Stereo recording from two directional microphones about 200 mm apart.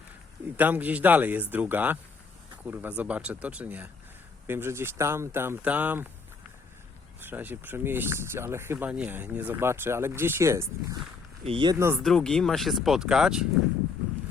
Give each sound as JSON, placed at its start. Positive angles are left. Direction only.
{"t": 0.5, "sound": "speech", "side_deg": -10}
{"t": 7.2, "sound": "speech", "side_deg": -10}
{"t": 11.9, "sound": "speech", "side_deg": 5}